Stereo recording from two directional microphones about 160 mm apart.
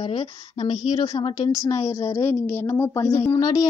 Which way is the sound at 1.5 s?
20° left (ahead or behind).